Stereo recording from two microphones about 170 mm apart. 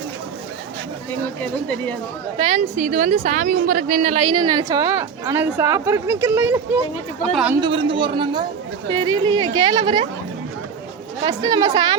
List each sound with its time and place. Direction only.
1.4 s speech: 10° left (ahead or behind)
2.4 s a woman's voice: 35° right (ahead or behind)
2.8 s a woman's voice: 50° right (ahead or behind)
4.3 s a woman's voice: 25° right (ahead or behind)
7.6 s speech: 30° right (ahead or behind)
11.3 s speech: 20° right (ahead or behind)